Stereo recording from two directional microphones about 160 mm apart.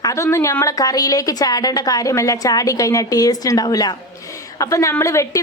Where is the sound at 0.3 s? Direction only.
20° left (ahead or behind).